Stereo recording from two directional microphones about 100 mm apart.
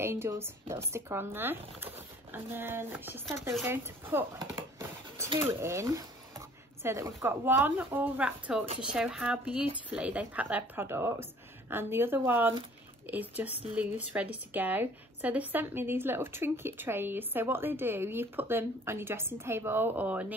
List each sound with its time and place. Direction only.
0.0 s a woman's voice: 25° right (ahead or behind)
4.6 s a sound: 30° right (ahead or behind)
5.4 s a woman's voice: 25° right (ahead or behind)